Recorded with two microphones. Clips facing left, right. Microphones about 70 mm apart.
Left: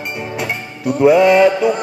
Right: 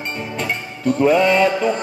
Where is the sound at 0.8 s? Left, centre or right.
Centre.